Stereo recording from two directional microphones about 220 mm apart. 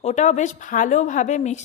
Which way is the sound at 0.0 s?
30° left (ahead or behind).